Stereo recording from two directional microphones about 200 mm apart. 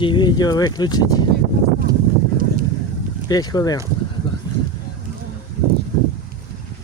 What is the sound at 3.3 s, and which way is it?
Speech, 20° left (ahead or behind).